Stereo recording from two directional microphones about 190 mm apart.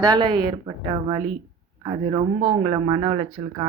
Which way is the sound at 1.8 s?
25° right (ahead or behind).